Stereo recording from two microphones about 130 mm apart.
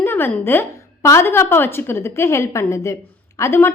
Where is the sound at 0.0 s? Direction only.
20° left (ahead or behind).